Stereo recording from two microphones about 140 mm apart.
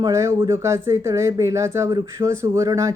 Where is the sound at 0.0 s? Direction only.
20° right (ahead or behind).